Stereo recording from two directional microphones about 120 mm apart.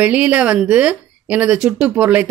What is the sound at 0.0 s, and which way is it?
Speech, 10° right (ahead or behind).